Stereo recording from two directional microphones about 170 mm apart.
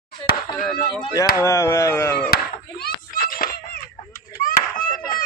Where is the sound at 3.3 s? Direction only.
60° left (ahead or behind).